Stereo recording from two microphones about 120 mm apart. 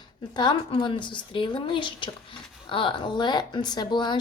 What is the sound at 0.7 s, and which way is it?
Speech, 45° left (ahead or behind).